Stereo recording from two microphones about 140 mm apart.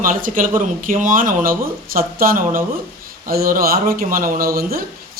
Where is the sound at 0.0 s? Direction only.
75° right (ahead or behind).